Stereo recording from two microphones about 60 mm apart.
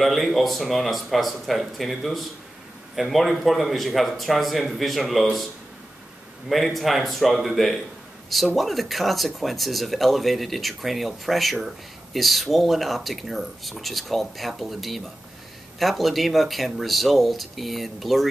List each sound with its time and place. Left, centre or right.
0.0 s speech: centre
6.5 s speech: centre